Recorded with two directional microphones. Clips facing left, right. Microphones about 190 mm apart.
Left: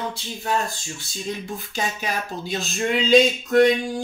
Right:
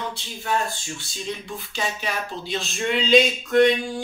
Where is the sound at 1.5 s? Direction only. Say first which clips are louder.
Left 1 dB; 45° left (ahead or behind).